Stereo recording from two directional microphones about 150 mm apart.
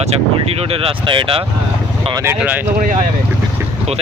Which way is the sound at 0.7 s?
35° right (ahead or behind).